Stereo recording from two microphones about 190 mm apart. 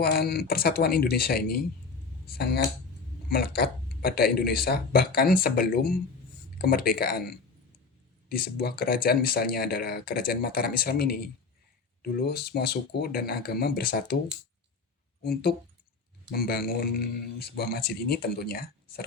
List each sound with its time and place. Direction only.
0.0 s speech: 55° left (ahead or behind)
15.2 s speech: 55° left (ahead or behind)